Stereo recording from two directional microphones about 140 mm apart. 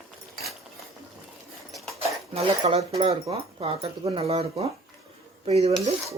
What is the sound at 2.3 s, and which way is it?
Speech, 45° right (ahead or behind).